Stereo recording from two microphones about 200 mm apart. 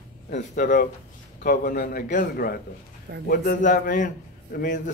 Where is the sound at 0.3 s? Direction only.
40° left (ahead or behind).